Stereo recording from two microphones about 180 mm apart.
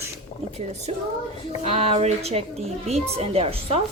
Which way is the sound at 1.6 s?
35° right (ahead or behind).